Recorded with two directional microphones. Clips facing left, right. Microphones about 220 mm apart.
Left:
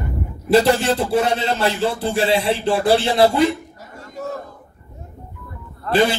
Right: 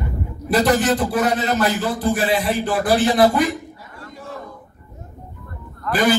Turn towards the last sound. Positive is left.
turn(degrees=25)  # may be behind; listen again after turning